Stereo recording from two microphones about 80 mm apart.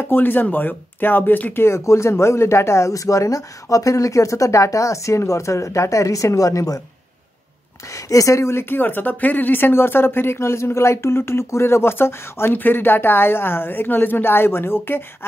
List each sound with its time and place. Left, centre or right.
0.0 s speech: left
7.9 s speech: left